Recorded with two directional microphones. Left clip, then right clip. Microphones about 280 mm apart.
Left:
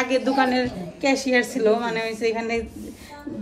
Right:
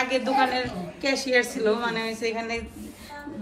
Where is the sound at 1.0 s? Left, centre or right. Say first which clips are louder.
Left 4 dB; right.